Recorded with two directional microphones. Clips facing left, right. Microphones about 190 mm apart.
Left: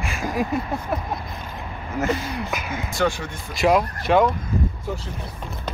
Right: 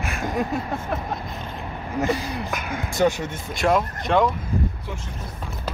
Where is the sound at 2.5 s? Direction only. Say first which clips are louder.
Even; 5° left (ahead or behind).